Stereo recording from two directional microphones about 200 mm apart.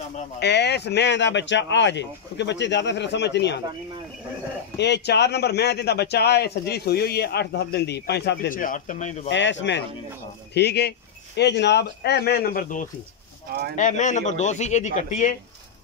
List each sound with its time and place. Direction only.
0.4 s a man's voice: 60° left (ahead or behind)
4.7 s a man's voice: 60° left (ahead or behind); by 9.3 s 35° left (ahead or behind)
9.3 s a man's voice: 65° left (ahead or behind); by 12.8 s 50° left (ahead or behind)
13.7 s a man's voice: 40° left (ahead or behind)